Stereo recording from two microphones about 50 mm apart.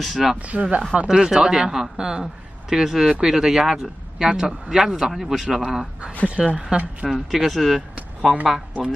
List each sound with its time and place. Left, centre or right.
0.0 s speech: centre
0.4 s speech: right
1.1 s speech: centre
6.2 s speech: right
7.1 s speech: centre
8.3 s speech: centre